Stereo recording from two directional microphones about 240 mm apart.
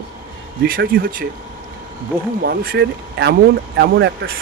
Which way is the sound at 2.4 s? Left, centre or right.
Right.